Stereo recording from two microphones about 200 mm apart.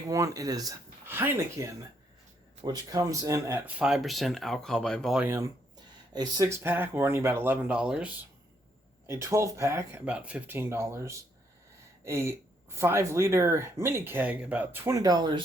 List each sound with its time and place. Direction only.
0.1 s speech: 15° right (ahead or behind)